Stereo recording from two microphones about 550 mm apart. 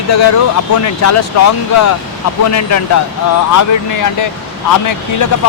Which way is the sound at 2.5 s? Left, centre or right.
Left.